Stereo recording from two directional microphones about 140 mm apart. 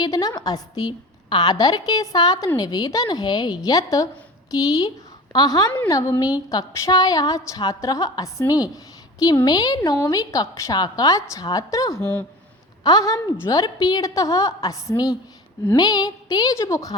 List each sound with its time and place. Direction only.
0.0 s a woman's voice: 25° left (ahead or behind)
8.7 s a sound: 25° left (ahead or behind)
9.4 s a woman's voice: 30° left (ahead or behind)